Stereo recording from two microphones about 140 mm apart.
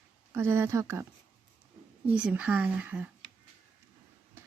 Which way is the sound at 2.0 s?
10° right (ahead or behind).